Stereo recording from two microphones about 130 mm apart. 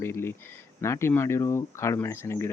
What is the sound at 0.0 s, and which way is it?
Speech, 20° left (ahead or behind).